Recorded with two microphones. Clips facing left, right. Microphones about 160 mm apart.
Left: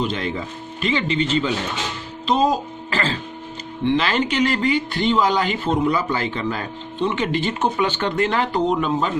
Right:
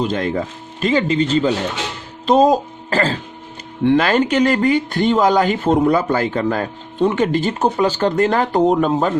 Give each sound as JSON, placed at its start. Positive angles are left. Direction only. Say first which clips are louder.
{"t": 0.0, "sound": "speech", "louder": "right 5 dB", "side_deg": -45}